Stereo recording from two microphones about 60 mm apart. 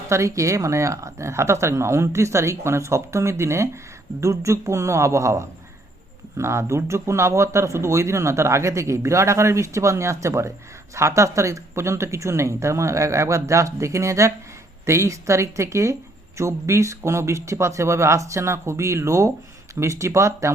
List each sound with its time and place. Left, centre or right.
0.1 s a woman's voice: right